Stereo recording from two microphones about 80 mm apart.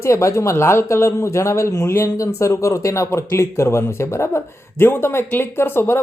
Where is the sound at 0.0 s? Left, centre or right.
Left.